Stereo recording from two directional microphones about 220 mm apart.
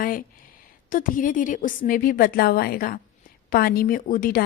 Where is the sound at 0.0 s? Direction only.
40° left (ahead or behind).